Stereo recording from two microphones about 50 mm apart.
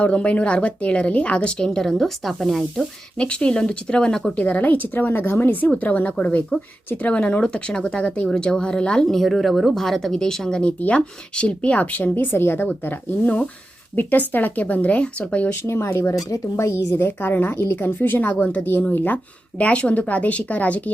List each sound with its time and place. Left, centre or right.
0.0 s speech: left
1.6 s speech: centre
3.2 s speech: left
4.4 s a woman's voice: left
5.5 s a woman's voice: left; by 9.0 s centre
9.0 s speech: centre
10.6 s speech: left
12.1 s a woman's voice: left
12.8 s a woman's voice: left
15.6 s speech: left
16.9 s a woman's voice: left